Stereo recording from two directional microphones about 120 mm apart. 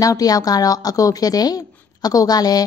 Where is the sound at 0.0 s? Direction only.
30° left (ahead or behind).